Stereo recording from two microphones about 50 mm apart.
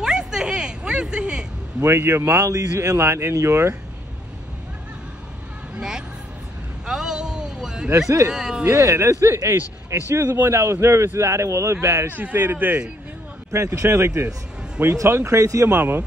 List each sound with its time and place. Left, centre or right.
0.0 s vehicle: centre
1.9 s speech: right
5.8 s vehicle: centre
6.9 s a sound: centre
8.3 s speech: centre
8.6 s speech: right
12.2 s a man's voice: right
13.5 s speech: right
13.8 s speech: right
15.7 s a man's voice: right